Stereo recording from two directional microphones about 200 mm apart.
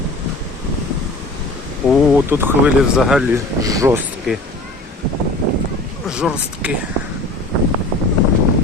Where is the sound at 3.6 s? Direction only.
15° right (ahead or behind).